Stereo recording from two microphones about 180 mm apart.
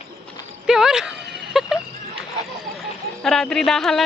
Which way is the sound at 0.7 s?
5° right (ahead or behind).